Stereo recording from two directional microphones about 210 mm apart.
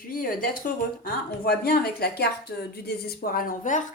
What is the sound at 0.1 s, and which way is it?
A woman's voice, 40° left (ahead or behind).